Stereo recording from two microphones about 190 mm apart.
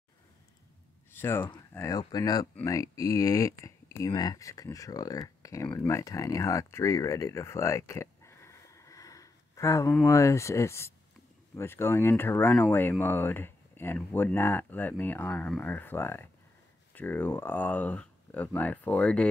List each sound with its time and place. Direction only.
1.1 s speech: 10° left (ahead or behind)